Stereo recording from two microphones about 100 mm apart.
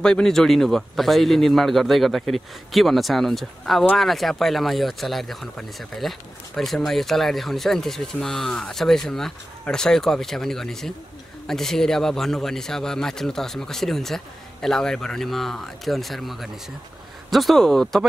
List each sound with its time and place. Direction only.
0.0 s speech: 5° left (ahead or behind)